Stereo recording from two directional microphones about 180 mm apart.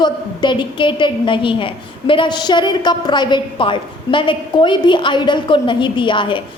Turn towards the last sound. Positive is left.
turn(degrees=25)  # may be behind; listen again after turning